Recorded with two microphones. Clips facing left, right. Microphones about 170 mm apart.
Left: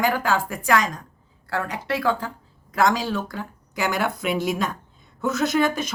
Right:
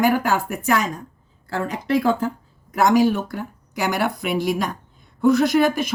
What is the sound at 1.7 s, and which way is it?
Speech, 65° left (ahead or behind).